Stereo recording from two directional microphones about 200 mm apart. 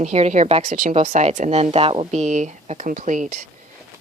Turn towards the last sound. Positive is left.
turn(degrees=-35)  # may be behind; listen again after turning